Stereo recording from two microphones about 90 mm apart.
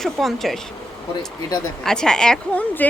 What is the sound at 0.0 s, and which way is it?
Speech, centre (ahead or behind).